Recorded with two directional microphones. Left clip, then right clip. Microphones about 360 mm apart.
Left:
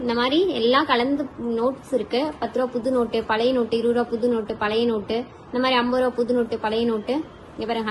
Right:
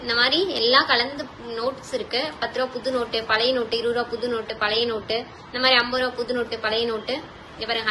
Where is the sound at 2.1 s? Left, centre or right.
Left.